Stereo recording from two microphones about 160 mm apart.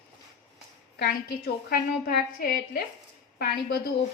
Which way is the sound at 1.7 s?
75° left (ahead or behind).